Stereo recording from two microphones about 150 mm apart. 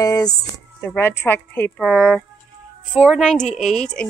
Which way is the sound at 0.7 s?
15° left (ahead or behind).